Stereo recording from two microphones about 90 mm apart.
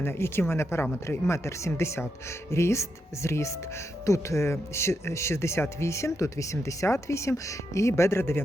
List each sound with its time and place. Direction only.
0.0 s speech: 25° left (ahead or behind)